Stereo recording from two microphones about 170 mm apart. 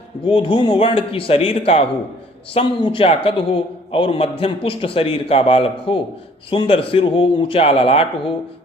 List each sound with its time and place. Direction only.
0.3 s a man's voice: 30° left (ahead or behind)